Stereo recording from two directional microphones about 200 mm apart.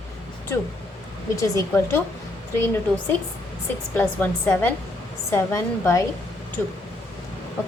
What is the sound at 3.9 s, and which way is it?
A woman's voice, 10° left (ahead or behind).